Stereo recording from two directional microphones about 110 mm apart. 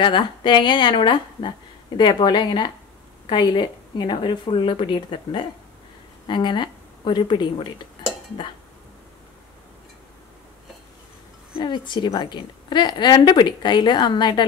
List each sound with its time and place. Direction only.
0.0 s a woman's voice: 45° left (ahead or behind)
11.5 s a woman's voice: 45° left (ahead or behind)